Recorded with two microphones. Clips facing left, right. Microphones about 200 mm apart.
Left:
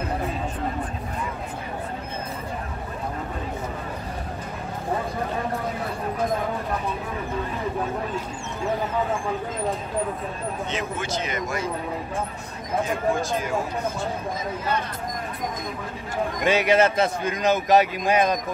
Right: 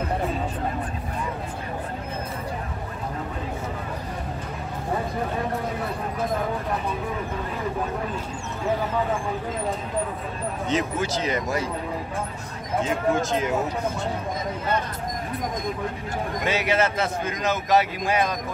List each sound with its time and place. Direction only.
10.7 s speech: 35° right (ahead or behind)
12.8 s speech: 20° right (ahead or behind)
16.4 s speech: 15° left (ahead or behind)